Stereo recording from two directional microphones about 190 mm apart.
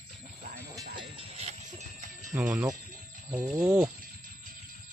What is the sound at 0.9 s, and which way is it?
Jingle bell, 25° right (ahead or behind).